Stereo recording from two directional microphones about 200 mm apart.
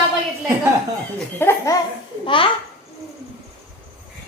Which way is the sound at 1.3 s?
15° left (ahead or behind).